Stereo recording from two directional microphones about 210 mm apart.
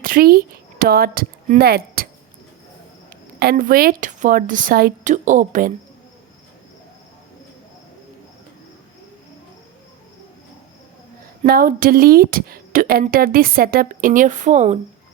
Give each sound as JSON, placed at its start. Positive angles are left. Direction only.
{"t": 0.0, "sound": "speech", "side_deg": -45}
{"t": 3.1, "sound": "a woman's voice", "side_deg": -45}
{"t": 11.4, "sound": "a woman's voice", "side_deg": -45}